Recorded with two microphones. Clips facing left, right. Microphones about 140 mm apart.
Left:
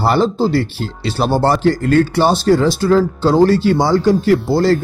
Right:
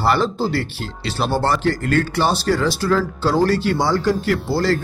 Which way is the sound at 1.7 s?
30° left (ahead or behind).